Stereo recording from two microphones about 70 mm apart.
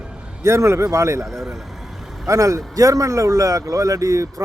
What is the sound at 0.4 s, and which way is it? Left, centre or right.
Speech, right.